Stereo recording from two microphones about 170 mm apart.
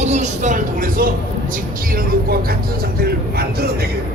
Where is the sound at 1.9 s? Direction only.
65° right (ahead or behind).